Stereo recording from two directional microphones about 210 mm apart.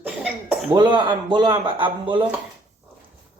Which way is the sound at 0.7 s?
20° right (ahead or behind).